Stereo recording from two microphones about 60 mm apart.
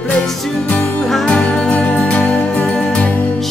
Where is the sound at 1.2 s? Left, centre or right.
Centre.